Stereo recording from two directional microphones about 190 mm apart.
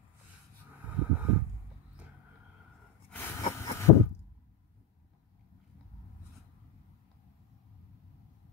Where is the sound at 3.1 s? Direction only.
10° left (ahead or behind).